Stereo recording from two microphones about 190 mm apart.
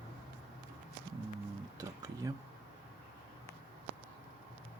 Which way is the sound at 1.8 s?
20° right (ahead or behind).